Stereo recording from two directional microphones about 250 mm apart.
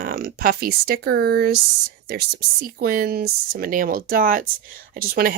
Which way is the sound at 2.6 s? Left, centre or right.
Right.